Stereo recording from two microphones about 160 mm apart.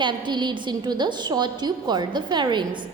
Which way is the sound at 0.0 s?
30° right (ahead or behind).